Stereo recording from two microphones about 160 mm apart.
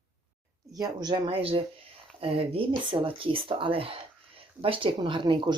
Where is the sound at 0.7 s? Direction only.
25° right (ahead or behind).